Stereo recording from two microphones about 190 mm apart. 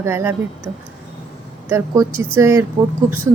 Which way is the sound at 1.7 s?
10° right (ahead or behind).